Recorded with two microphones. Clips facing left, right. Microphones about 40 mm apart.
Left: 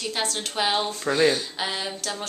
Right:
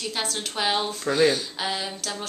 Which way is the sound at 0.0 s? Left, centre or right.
Centre.